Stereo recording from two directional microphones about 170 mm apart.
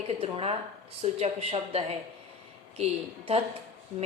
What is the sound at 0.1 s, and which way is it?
A woman's voice, 35° right (ahead or behind).